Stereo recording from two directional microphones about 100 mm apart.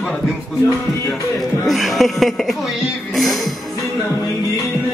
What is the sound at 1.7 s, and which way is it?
Speech, centre (ahead or behind).